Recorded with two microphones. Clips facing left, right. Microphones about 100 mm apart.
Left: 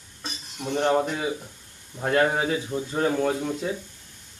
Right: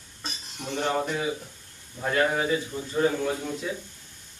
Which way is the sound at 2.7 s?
60° left (ahead or behind).